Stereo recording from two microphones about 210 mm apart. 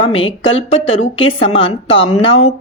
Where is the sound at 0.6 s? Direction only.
30° left (ahead or behind).